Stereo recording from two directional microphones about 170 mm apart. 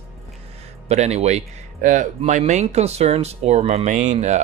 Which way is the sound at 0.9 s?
40° right (ahead or behind).